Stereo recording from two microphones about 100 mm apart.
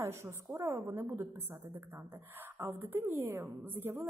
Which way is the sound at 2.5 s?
20° right (ahead or behind).